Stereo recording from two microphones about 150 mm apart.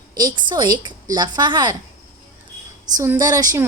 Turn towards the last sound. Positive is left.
turn(degrees=-25)  # may be behind; listen again after turning